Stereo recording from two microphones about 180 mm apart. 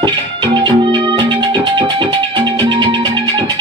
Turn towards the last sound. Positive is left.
turn(degrees=-25)  # may be behind; listen again after turning